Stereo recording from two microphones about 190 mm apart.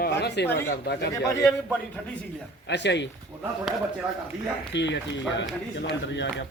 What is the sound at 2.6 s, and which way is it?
Speech, 65° left (ahead or behind).